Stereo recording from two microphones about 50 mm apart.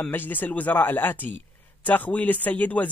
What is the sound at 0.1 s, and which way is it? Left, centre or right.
Speech, left.